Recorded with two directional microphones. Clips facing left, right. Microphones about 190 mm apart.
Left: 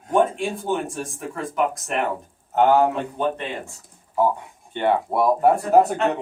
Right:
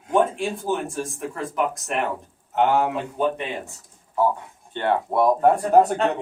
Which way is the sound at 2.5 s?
40° left (ahead or behind).